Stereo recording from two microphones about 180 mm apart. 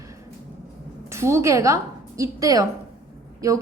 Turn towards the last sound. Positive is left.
turn(degrees=-15)  # may be behind; listen again after turning